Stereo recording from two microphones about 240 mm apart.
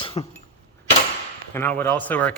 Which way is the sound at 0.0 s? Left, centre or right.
Left.